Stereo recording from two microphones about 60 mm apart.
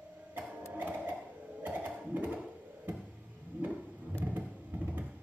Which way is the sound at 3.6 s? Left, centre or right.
Right.